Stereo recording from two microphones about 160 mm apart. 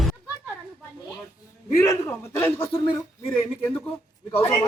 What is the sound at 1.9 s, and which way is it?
Speech, 15° left (ahead or behind).